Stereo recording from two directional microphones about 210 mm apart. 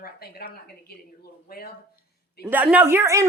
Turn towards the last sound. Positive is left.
turn(degrees=-15)  # may be behind; listen again after turning